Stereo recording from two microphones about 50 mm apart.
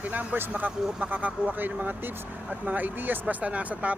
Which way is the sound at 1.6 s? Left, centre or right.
Right.